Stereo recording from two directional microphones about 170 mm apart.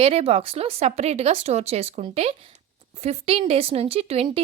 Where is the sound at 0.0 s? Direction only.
35° right (ahead or behind).